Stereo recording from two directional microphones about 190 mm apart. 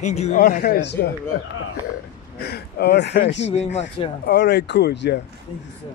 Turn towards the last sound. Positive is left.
turn(degrees=65)  # may be behind; listen again after turning